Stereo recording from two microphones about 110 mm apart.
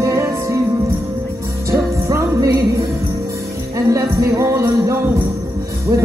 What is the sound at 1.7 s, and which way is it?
Music, 25° right (ahead or behind).